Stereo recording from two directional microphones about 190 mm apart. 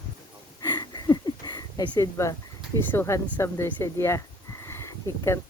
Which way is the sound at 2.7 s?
15° left (ahead or behind).